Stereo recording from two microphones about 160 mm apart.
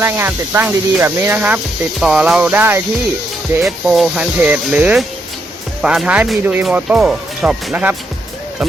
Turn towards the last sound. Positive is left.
turn(degrees=-10)  # may be behind; listen again after turning